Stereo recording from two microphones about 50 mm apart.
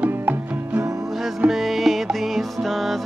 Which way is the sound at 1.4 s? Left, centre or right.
Centre.